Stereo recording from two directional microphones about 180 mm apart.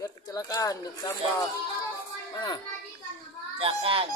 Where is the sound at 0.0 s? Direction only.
20° left (ahead or behind).